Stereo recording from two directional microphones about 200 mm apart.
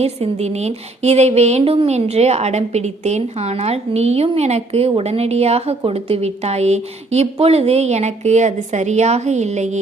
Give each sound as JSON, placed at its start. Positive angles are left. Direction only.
{"t": 0.0, "sound": "speech", "side_deg": -30}